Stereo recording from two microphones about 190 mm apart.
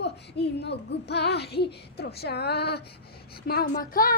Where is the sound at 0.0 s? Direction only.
60° left (ahead or behind).